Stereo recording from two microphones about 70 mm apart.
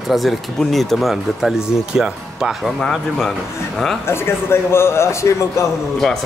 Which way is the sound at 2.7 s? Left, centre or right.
Centre.